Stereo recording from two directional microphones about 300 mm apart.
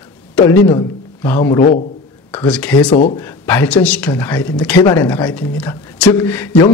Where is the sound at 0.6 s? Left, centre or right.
Centre.